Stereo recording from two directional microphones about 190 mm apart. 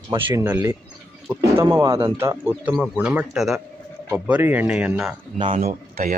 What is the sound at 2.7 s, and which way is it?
Speech, centre (ahead or behind).